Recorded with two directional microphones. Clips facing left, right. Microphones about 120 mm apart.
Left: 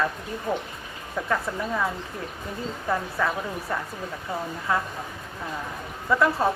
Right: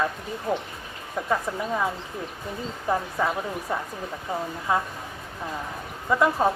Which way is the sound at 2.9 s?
15° right (ahead or behind).